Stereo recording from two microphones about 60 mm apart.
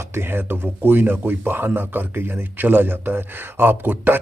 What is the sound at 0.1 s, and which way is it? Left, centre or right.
Speech, right.